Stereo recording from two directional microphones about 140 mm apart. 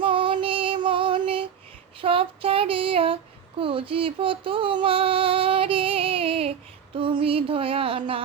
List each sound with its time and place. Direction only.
0.0 s female singing: 35° right (ahead or behind)
2.0 s speech: 40° right (ahead or behind)